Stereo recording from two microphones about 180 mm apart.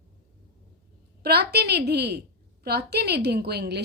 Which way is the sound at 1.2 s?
60° right (ahead or behind).